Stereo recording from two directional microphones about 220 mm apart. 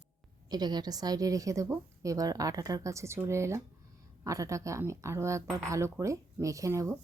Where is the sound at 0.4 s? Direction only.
20° right (ahead or behind).